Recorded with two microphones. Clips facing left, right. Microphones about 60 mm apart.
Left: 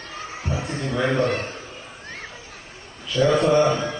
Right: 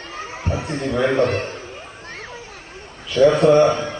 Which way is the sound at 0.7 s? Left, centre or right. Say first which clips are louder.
Right 4 dB; right.